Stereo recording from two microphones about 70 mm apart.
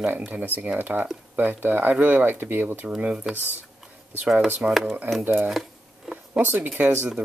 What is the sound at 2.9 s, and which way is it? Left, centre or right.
Speech, centre.